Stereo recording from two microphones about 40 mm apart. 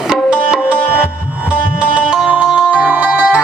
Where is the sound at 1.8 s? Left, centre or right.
Right.